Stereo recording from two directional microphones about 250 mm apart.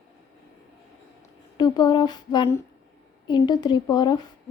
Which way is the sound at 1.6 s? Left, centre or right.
Centre.